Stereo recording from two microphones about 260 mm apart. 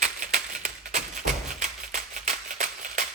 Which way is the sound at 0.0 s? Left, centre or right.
Right.